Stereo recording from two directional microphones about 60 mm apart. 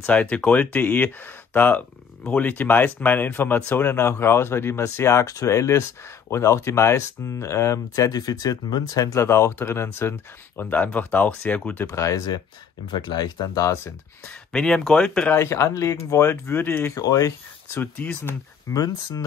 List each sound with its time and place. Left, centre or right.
0.0 s speech: left
9.2 s speech: left
11.9 s speech: left
13.4 s speech: left
14.2 s speech: centre
15.3 s speech: left
16.3 s speech: left
16.9 s speech: left
17.9 s speech: left
18.7 s speech: left